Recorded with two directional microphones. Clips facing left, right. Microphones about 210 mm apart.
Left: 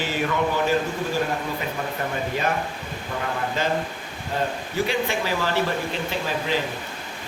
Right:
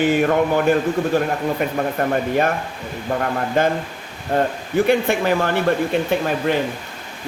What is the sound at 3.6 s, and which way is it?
Speech, 55° right (ahead or behind).